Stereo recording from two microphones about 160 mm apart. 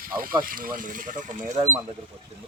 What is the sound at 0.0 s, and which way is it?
Speech, 65° right (ahead or behind).